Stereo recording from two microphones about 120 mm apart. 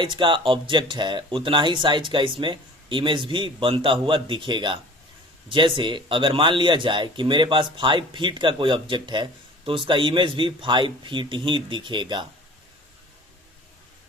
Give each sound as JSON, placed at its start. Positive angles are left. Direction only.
{"t": 0.0, "sound": "speech", "side_deg": -45}